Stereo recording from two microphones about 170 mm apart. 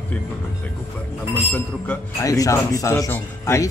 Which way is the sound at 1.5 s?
15° left (ahead or behind).